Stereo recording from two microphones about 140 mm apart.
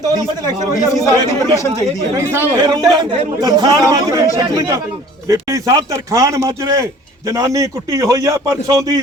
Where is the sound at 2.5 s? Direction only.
30° right (ahead or behind).